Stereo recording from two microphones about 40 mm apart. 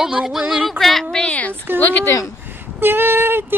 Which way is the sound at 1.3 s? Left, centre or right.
Left.